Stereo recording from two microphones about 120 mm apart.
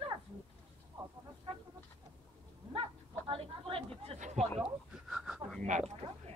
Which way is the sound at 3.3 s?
50° right (ahead or behind).